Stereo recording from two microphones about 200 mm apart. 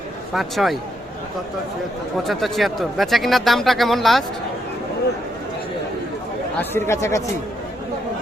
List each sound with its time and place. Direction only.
0.3 s speech: centre (ahead or behind)
2.2 s speech: centre (ahead or behind)
6.6 s speech: 10° left (ahead or behind)